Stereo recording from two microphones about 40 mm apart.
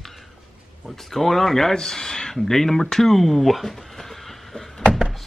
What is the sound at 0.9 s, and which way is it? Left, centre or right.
Speech, centre.